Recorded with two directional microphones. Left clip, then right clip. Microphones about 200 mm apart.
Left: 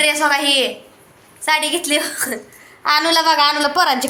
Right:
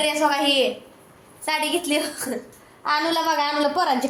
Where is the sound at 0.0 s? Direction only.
Centre (ahead or behind).